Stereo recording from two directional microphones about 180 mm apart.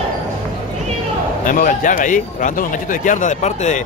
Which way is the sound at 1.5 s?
45° left (ahead or behind).